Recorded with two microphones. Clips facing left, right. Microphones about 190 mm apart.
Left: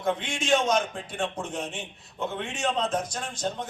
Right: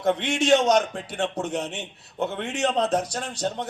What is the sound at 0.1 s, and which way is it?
A man's voice, 70° right (ahead or behind).